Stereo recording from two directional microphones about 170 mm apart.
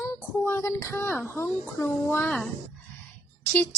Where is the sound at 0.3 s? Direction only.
15° left (ahead or behind).